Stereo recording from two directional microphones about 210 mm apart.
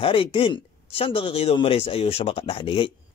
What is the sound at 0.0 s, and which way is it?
Speech, 25° left (ahead or behind).